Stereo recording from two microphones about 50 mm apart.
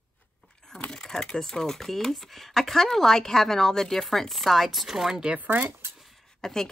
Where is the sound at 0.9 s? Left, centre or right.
Centre.